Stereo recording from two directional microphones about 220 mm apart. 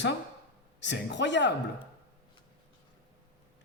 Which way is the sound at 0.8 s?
55° left (ahead or behind).